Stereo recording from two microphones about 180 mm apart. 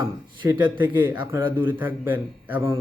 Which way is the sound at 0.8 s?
10° right (ahead or behind).